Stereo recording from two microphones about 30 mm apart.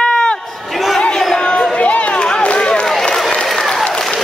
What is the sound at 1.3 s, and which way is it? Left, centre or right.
Crowd, left.